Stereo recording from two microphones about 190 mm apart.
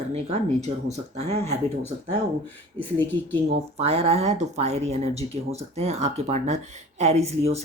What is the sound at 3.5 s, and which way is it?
Speech, 35° right (ahead or behind).